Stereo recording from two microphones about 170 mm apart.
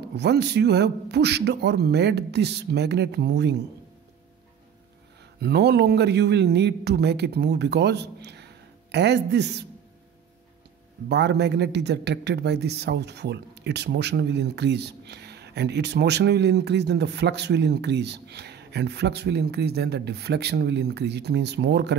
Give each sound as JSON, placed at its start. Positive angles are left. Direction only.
{"t": 0.0, "sound": "a man's voice", "side_deg": -80}
{"t": 5.4, "sound": "a man's voice", "side_deg": -75}
{"t": 11.1, "sound": "a man's voice", "side_deg": -80}